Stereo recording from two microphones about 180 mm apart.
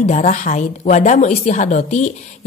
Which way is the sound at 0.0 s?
40° left (ahead or behind).